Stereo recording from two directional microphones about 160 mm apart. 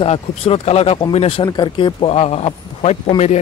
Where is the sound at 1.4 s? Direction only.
25° left (ahead or behind).